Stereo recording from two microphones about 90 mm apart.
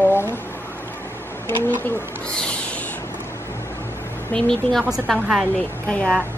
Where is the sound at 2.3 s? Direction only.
10° left (ahead or behind).